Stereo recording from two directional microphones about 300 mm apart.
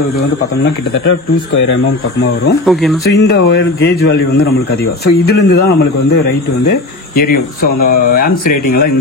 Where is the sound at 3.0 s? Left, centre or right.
Left.